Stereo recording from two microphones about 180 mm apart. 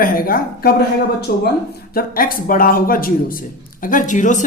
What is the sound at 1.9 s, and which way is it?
A man's voice, 55° left (ahead or behind).